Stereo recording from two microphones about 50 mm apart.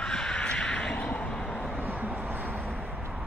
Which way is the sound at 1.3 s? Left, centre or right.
Centre.